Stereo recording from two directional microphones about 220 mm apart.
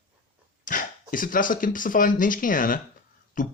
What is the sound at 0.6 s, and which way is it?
Speech, 35° left (ahead or behind).